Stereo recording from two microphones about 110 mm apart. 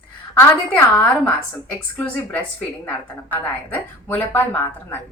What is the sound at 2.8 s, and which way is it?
A woman's voice, 15° left (ahead or behind).